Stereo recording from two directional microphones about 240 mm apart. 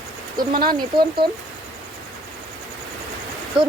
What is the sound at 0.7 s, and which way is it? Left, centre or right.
Speech, centre.